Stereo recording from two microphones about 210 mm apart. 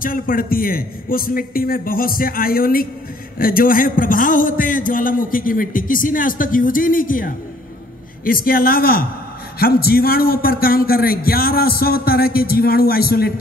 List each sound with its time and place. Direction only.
0.0 s a man's voice: 40° left (ahead or behind)